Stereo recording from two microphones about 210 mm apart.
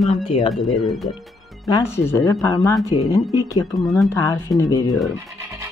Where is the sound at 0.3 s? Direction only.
25° left (ahead or behind).